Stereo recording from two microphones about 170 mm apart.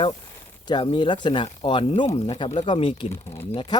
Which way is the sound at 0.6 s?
25° left (ahead or behind).